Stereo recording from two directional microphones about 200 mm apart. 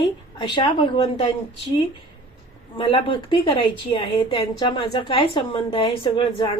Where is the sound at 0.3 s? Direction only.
25° left (ahead or behind).